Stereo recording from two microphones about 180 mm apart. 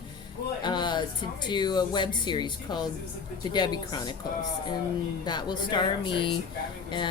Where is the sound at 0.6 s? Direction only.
25° left (ahead or behind).